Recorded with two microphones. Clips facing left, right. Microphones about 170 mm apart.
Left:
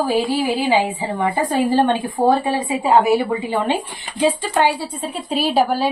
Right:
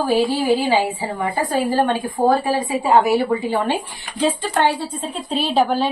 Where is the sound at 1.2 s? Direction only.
20° left (ahead or behind).